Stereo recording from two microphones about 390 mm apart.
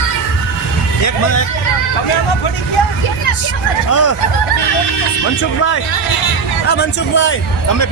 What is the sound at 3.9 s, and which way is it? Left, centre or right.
Fowl, left.